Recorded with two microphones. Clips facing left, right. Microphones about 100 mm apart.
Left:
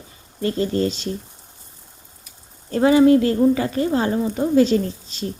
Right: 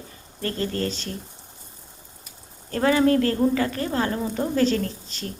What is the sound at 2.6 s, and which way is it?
Speech, 20° left (ahead or behind).